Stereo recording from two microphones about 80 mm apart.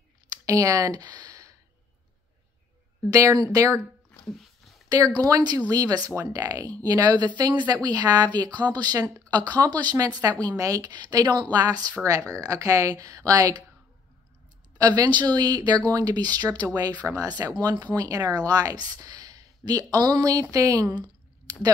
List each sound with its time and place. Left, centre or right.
0.5 s speech: right
3.1 s speech: right
5.1 s speech: right
10.9 s speech: right
14.8 s speech: right
17.6 s speech: right